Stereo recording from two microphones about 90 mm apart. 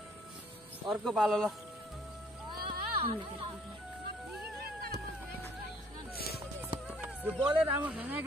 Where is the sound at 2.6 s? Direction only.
85° right.